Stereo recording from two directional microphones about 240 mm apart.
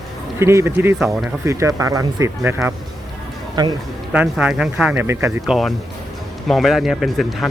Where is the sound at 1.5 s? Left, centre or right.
Centre.